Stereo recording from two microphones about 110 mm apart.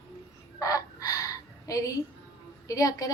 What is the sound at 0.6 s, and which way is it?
Crow, 30° left (ahead or behind).